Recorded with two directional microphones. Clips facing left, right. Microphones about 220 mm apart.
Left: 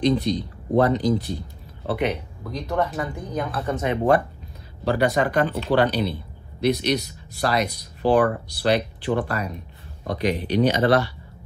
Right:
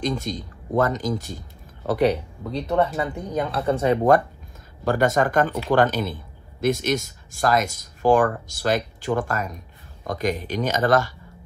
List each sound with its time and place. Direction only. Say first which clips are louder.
0.0 s speech: left 6 dB; 45° right (ahead or behind)